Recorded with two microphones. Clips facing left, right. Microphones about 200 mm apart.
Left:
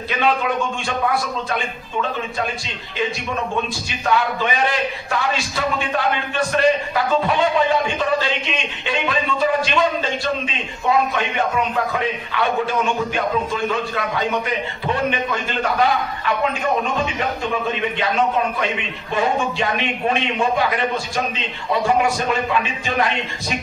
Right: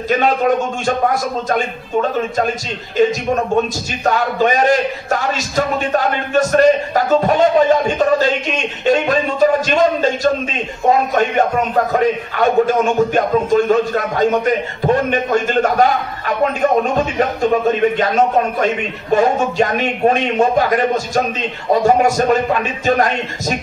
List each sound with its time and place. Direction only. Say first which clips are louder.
0.1 s a man's voice: right 6 dB; 45° right (ahead or behind)